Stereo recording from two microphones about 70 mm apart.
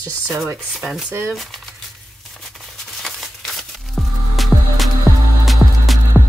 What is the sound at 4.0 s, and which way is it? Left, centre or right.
Music, centre.